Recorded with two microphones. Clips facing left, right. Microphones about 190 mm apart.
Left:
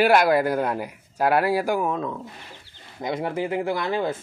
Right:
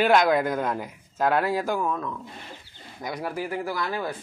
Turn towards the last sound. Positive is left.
turn(degrees=25)  # may be behind; listen again after turning